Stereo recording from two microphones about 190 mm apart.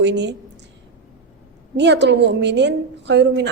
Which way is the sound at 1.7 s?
65° right (ahead or behind).